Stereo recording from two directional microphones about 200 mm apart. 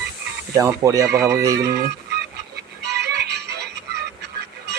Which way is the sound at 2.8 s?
55° right (ahead or behind).